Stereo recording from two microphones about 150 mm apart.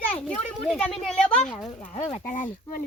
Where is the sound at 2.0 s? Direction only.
45° left (ahead or behind).